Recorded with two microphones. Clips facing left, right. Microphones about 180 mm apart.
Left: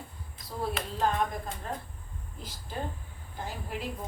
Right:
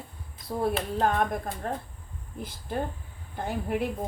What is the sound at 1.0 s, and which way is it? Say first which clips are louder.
Speech: right 2 dB; 60° right (ahead or behind).